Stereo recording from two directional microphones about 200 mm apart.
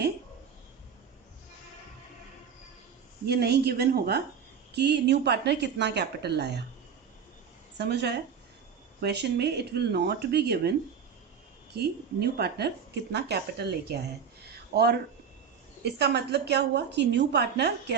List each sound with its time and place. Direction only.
3.2 s a woman's voice: 55° right (ahead or behind)
7.8 s speech: 55° right (ahead or behind)
11.7 s a woman's voice: 55° right (ahead or behind)